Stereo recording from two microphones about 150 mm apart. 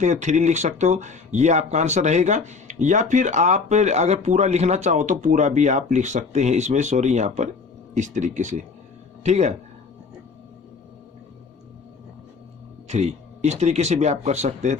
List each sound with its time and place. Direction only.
0.0 s speech: 50° right (ahead or behind)
12.9 s speech: 45° right (ahead or behind)